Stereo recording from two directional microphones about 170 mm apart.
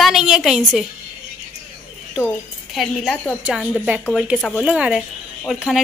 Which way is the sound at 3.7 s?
5° right (ahead or behind).